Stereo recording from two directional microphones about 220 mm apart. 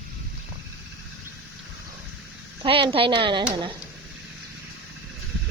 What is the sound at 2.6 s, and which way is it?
Speech, 25° right (ahead or behind).